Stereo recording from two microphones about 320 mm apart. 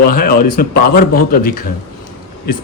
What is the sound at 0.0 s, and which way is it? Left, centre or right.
Speech, left.